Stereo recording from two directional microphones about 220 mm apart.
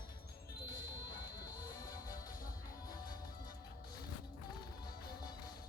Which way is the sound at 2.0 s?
40° left (ahead or behind).